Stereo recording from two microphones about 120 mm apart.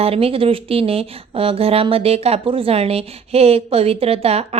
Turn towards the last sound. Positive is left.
turn(degrees=-60)  # may be behind; listen again after turning